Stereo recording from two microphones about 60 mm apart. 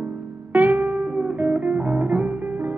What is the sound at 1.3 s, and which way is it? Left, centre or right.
Guitar, right.